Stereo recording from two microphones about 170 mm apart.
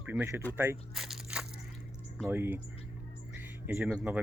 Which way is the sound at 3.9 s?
5° right (ahead or behind).